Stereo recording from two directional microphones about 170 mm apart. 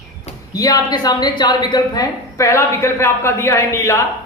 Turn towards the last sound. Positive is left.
turn(degrees=20)  # may be behind; listen again after turning